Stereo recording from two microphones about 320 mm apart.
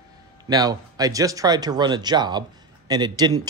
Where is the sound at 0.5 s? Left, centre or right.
Centre.